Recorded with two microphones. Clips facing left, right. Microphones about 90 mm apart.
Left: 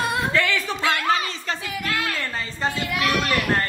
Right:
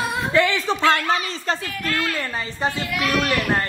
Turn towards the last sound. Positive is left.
turn(degrees=-20)  # may be behind; listen again after turning